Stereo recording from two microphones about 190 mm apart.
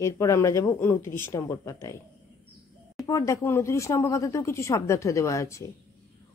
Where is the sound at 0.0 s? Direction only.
15° left (ahead or behind).